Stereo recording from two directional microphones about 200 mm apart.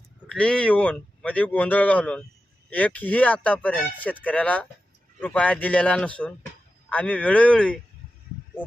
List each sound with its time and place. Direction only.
0.3 s speech: 5° left (ahead or behind)